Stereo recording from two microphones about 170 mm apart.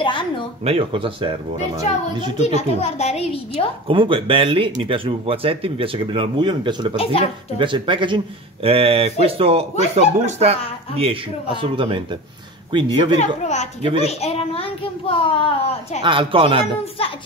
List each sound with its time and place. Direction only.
0.0 s a sound: 30° left (ahead or behind)
0.7 s speech: 35° right (ahead or behind)
2.3 s a child's voice: 40° left (ahead or behind)
3.8 s speech: 30° right (ahead or behind)
7.0 s a child's voice: 35° left (ahead or behind)
7.5 s speech: 30° right (ahead or behind)
13.2 s a child's voice: 40° left (ahead or behind)
16.0 s speech: 30° right (ahead or behind)